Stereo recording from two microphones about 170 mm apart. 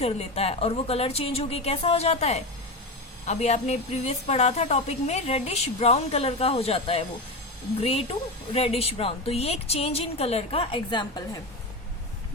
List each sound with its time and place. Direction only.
0.0 s a woman's voice: 35° left (ahead or behind)